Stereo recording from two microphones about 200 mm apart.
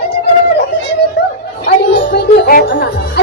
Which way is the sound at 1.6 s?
55° left (ahead or behind).